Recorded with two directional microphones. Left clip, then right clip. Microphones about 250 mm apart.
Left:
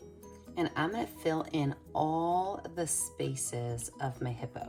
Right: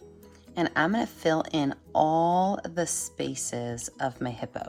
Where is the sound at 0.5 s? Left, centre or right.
Right.